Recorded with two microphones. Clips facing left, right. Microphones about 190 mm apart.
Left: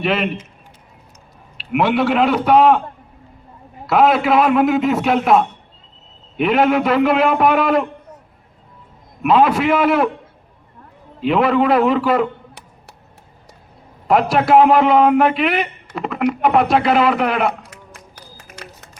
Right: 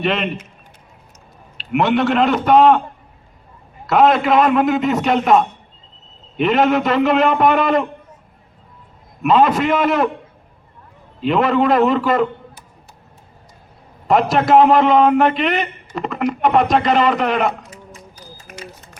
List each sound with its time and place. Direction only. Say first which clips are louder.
0.0 s a man's voice: left 1 dB; 5° left (ahead or behind)
1.5 s a man's voice: even; 5° left (ahead or behind)
3.8 s a man's voice: even; 5° left (ahead or behind)
9.2 s a man's voice: even; 5° left (ahead or behind)
11.2 s a man's voice: even; 5° left (ahead or behind)
14.1 s a man's voice: even; 5° left (ahead or behind)
17.7 s run: right 3 dB; 65° left (ahead or behind)